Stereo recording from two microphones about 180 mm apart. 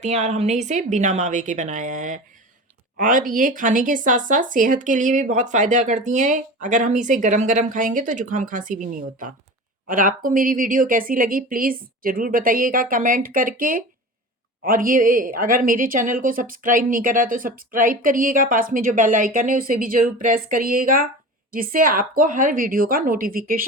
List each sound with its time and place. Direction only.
0.0 s speech: 40° right (ahead or behind)